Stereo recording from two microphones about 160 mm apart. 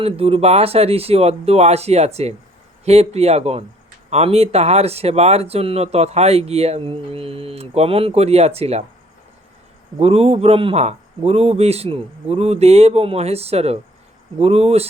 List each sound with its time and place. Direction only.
0.0 s speech: 40° right (ahead or behind)
10.0 s speech: 40° right (ahead or behind)